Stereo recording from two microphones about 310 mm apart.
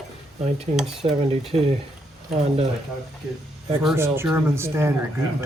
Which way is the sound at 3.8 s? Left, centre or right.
Centre.